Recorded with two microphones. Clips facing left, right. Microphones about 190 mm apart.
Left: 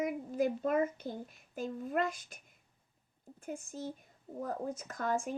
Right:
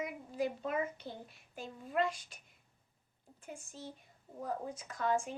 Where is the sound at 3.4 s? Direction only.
45° left (ahead or behind).